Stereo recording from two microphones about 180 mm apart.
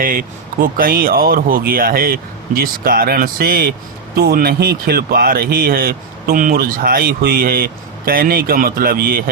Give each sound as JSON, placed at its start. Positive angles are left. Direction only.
{"t": 0.0, "sound": "speech", "side_deg": -50}